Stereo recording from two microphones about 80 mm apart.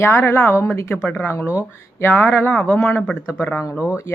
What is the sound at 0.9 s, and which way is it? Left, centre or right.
Speech, centre.